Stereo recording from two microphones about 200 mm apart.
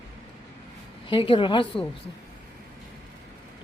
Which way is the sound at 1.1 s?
25° left (ahead or behind).